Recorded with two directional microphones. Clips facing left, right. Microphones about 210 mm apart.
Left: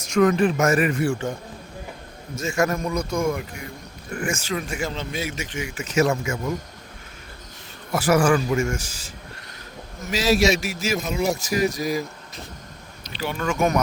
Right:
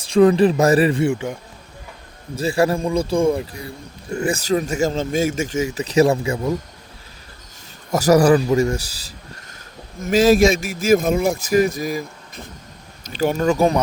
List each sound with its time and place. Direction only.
0.0 s speech: 30° right (ahead or behind); by 1.4 s 15° right (ahead or behind)
2.3 s speech: 35° right (ahead or behind)
7.9 s speech: 40° right (ahead or behind)
10.0 s a man's voice: 50° right (ahead or behind)
13.1 s speech: 45° right (ahead or behind)